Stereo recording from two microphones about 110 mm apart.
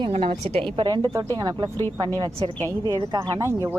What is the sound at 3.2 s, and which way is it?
Speech, 25° right (ahead or behind).